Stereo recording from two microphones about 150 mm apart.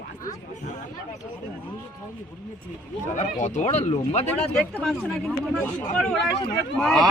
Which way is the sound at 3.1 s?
55° left (ahead or behind).